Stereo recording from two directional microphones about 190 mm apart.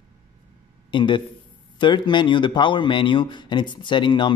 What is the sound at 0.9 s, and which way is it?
Speech, 25° left (ahead or behind).